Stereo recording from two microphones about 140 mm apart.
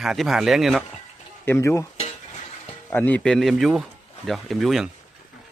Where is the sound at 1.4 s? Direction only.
20° left (ahead or behind).